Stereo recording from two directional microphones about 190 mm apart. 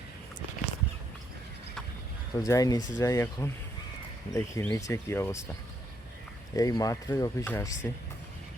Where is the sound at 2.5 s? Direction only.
20° left (ahead or behind).